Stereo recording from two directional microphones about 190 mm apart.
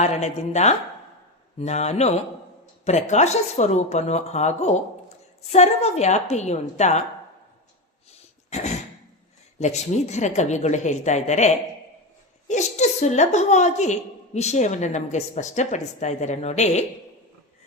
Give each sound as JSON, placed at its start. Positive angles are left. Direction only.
{"t": 0.0, "sound": "a woman's voice", "side_deg": 35}
{"t": 8.1, "sound": "dog", "side_deg": 35}
{"t": 9.6, "sound": "a woman's voice", "side_deg": 35}